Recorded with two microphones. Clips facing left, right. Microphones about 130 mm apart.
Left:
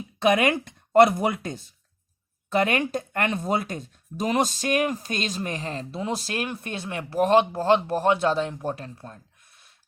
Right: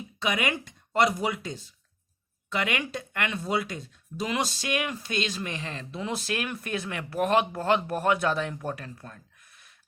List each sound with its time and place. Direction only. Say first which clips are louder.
0.2 s speech: left 8 dB; 50° left (ahead or behind); by 9.6 s 25° left (ahead or behind)